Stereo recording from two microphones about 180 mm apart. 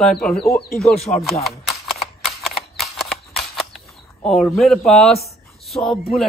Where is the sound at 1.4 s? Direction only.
Centre (ahead or behind).